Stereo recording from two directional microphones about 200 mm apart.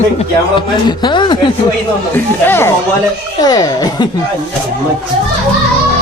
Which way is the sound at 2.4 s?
10° left (ahead or behind).